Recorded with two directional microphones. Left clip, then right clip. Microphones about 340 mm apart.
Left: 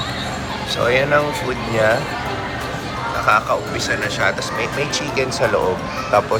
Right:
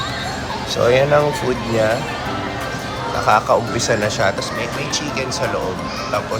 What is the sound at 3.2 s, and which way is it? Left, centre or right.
Speech, centre.